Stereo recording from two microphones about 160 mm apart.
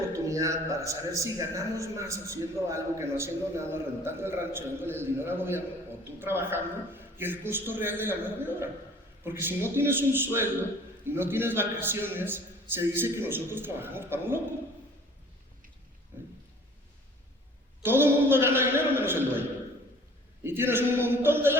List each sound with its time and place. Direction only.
0.1 s speech: 20° right (ahead or behind)
17.8 s speech: 15° right (ahead or behind)